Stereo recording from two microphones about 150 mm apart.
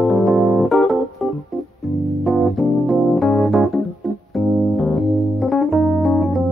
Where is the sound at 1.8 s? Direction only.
Centre (ahead or behind).